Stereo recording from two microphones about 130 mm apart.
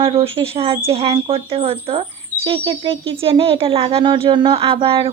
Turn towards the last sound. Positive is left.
turn(degrees=-45)  # may be behind; listen again after turning